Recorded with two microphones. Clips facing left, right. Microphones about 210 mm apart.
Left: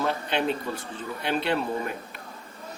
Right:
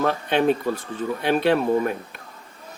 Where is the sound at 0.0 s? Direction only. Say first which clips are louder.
Right 6 dB; 55° right (ahead or behind).